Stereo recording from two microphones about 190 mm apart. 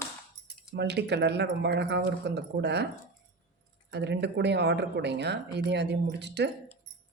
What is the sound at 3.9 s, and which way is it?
Speech, 65° right (ahead or behind).